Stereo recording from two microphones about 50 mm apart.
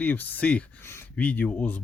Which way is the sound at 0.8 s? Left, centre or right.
Left.